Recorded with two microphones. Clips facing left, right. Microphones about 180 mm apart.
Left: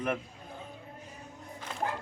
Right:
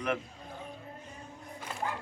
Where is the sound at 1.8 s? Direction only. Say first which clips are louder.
Left 2 dB; 45° left (ahead or behind).